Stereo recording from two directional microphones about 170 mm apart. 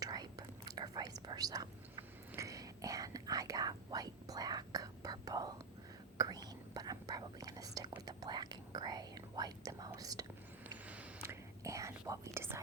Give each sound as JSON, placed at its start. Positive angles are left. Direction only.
{"t": 0.0, "sound": "whispering", "side_deg": -20}